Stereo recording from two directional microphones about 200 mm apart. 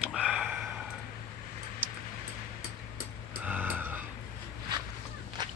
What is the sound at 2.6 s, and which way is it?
Vehicle, 90° left.